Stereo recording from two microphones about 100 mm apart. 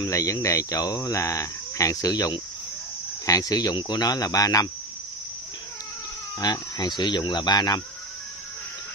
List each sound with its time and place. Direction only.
0.0 s speech: 30° left (ahead or behind)
6.4 s speech: 45° left (ahead or behind)